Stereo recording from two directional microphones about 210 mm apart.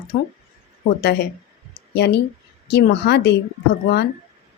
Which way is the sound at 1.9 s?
55° left (ahead or behind).